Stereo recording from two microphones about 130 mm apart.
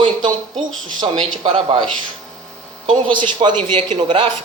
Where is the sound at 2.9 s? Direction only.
40° right (ahead or behind).